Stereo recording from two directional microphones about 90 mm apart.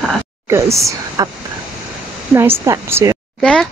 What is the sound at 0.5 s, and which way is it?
Speech, 35° right (ahead or behind).